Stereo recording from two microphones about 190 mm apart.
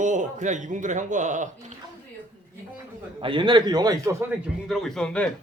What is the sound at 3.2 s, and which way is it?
A man's voice, 25° right (ahead or behind).